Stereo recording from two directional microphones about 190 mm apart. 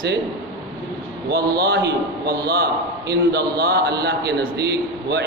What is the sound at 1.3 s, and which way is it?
A man's voice, 55° right (ahead or behind).